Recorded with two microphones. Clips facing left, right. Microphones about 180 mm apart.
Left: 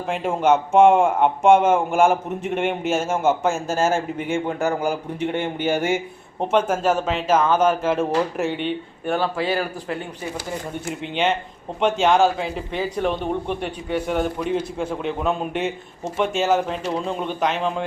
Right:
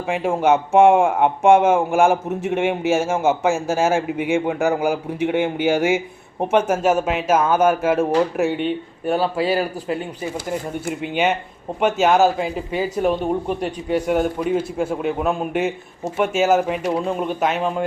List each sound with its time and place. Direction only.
0.1 s speech: 10° right (ahead or behind)
10.8 s a man's voice: 10° right (ahead or behind)
13.5 s a man's voice: 40° right (ahead or behind)
14.1 s speech: 5° right (ahead or behind)